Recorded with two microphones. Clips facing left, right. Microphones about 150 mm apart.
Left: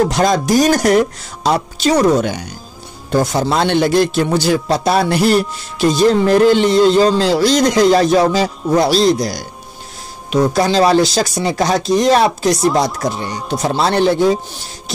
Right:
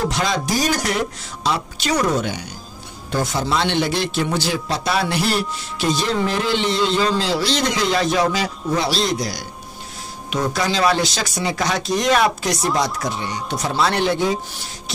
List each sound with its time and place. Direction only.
0.0 s a man's voice: 45° left (ahead or behind)